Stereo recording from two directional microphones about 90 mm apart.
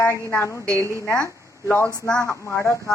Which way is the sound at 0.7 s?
35° right (ahead or behind).